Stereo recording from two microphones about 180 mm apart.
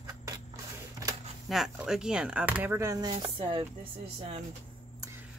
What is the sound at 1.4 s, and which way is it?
Speech, centre (ahead or behind).